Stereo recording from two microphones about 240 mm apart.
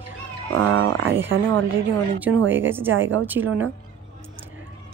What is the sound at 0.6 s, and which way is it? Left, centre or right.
Speech, right.